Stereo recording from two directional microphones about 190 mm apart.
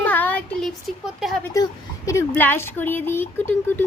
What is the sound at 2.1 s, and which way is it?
Speech, 10° left (ahead or behind).